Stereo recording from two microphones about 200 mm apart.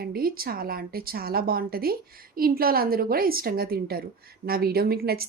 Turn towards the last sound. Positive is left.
turn(degrees=-50)  # may be behind; listen again after turning